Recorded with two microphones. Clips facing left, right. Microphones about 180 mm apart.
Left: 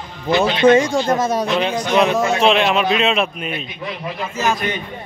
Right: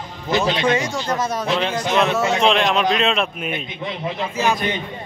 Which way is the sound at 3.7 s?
25° right (ahead or behind).